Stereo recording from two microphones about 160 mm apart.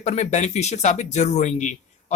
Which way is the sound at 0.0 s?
45° left (ahead or behind).